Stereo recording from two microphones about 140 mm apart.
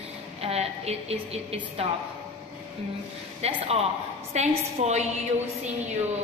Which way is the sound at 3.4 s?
50° right (ahead or behind).